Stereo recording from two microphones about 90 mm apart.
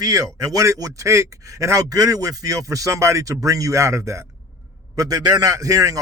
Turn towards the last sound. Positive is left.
turn(degrees=-40)  # may be behind; listen again after turning